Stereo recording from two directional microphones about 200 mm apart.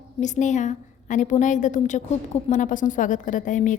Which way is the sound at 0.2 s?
35° left (ahead or behind).